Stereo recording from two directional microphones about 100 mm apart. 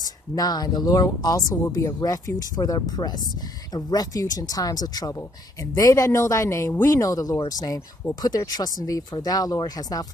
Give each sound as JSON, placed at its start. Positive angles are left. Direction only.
{"t": 0.0, "sound": "speech", "side_deg": 40}